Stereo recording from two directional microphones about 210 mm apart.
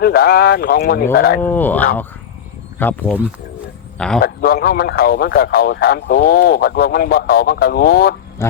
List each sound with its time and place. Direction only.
0.0 s a man's voice: 45° left (ahead or behind)
1.4 s a man's voice: 10° left (ahead or behind)
4.2 s a man's voice: 45° left (ahead or behind)
8.4 s speech: 10° left (ahead or behind)